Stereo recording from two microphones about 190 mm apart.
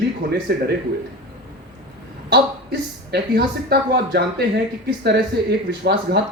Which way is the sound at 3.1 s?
60° right (ahead or behind).